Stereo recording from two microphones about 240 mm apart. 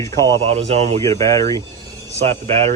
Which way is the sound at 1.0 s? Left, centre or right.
Centre.